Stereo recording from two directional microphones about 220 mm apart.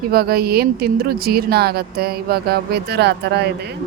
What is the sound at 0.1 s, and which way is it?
Speech, 45° right (ahead or behind).